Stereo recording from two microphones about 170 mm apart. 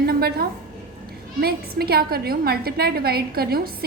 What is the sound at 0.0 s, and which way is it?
A woman's voice, 65° right (ahead or behind).